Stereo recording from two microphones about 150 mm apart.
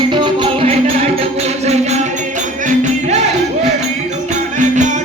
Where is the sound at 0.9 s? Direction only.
45° right (ahead or behind).